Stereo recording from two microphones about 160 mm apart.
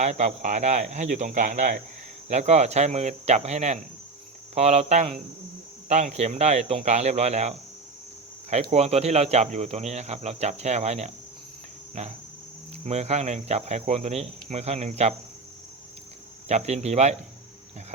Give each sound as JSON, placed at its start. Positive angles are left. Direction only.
{"t": 0.0, "sound": "speech", "side_deg": -45}
{"t": 8.7, "sound": "speech", "side_deg": -40}
{"t": 12.8, "sound": "speech", "side_deg": -45}
{"t": 16.5, "sound": "speech", "side_deg": -45}